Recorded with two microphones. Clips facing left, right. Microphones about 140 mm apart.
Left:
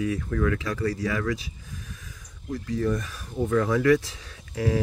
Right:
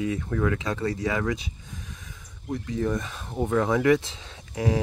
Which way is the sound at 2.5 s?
20° right (ahead or behind).